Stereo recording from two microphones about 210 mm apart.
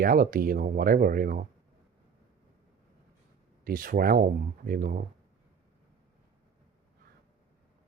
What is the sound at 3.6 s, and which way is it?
Speech, 40° right (ahead or behind).